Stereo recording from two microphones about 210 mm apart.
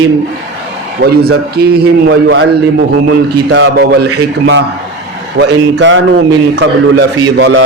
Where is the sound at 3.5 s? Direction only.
55° right (ahead or behind).